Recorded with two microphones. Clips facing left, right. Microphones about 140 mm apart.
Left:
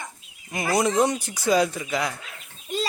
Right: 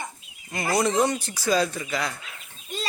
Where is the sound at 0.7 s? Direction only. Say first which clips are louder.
Left 1 dB; 20° left (ahead or behind).